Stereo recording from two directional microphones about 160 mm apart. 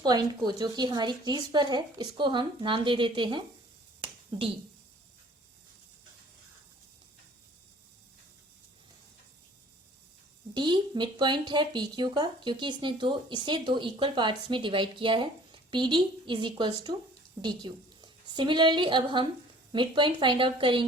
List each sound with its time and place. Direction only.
0.0 s speech: 25° right (ahead or behind)
10.5 s a woman's voice: 30° right (ahead or behind)